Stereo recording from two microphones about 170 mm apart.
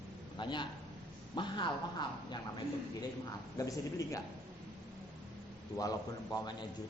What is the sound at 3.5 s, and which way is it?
Speech, 20° left (ahead or behind).